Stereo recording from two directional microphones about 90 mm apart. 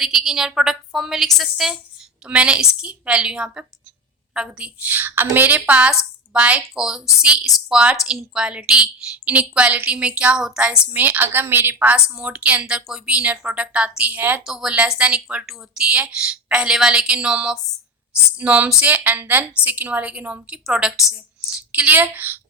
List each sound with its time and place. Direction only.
0.0 s a woman's voice: 5° right (ahead or behind)
10.9 s a woman's voice: 20° right (ahead or behind)
14.4 s a woman's voice: 5° right (ahead or behind); by 22.4 s 20° right (ahead or behind)